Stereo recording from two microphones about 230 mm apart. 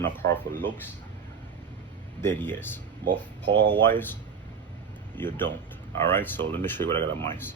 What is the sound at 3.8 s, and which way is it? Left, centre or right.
Speech, centre.